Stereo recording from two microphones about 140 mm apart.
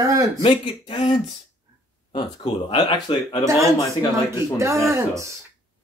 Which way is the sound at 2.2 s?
40° left (ahead or behind).